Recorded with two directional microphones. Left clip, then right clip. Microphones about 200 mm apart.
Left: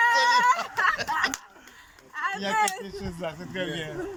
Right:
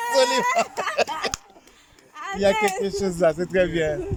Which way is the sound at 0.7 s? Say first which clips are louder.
Left 4 dB; 30° right (ahead or behind).